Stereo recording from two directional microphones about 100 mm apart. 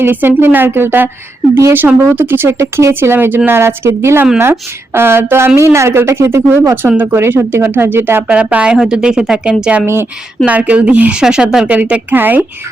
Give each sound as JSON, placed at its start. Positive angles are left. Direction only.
{"t": 0.0, "sound": "speech", "side_deg": -20}
{"t": 9.8, "sound": "speech", "side_deg": -25}
{"t": 10.4, "sound": "speech", "side_deg": -10}